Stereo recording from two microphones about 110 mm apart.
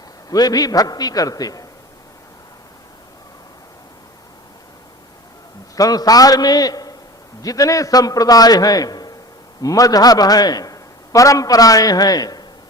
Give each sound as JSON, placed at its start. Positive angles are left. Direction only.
{"t": 0.3, "sound": "a man's voice", "side_deg": 35}
{"t": 5.7, "sound": "a man's voice", "side_deg": 35}